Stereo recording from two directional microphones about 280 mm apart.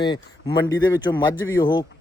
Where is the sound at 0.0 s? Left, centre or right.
Centre.